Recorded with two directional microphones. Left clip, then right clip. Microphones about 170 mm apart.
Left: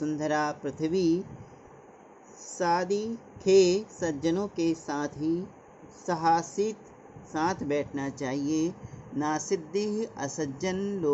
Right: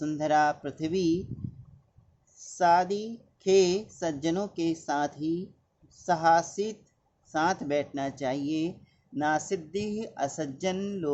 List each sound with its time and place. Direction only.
0.0 s a woman's voice: 15° right (ahead or behind)
2.6 s a woman's voice: 10° right (ahead or behind)